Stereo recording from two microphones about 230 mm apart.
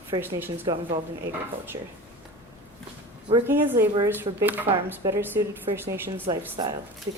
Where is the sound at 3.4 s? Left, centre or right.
Centre.